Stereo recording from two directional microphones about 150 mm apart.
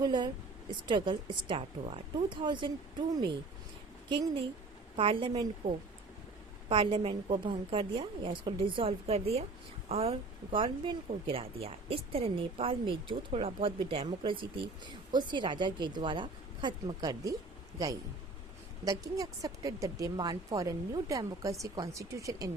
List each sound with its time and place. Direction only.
0.0 s speech: 30° right (ahead or behind)
4.1 s speech: 30° right (ahead or behind)
18.9 s speech: 25° right (ahead or behind)